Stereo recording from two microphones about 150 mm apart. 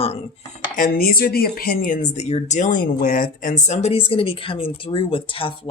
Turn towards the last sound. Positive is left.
turn(degrees=35)  # may be behind; listen again after turning